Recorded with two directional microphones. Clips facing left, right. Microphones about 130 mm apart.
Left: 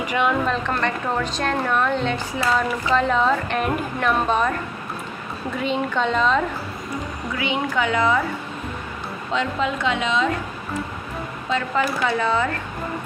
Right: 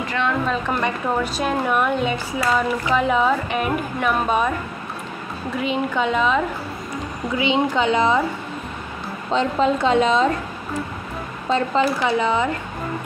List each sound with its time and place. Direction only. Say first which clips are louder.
0.0 s a woman's voice: left 2 dB; 15° left (ahead or behind)
0.5 s a woman's voice: right 1 dB; 10° right (ahead or behind)
5.6 s a woman's voice: right 1 dB; 5° right (ahead or behind)
7.3 s speech: right 4 dB; 20° right (ahead or behind)
9.3 s a woman's voice: right 5 dB; 35° right (ahead or behind)
11.5 s speech: right 3 dB; 25° right (ahead or behind)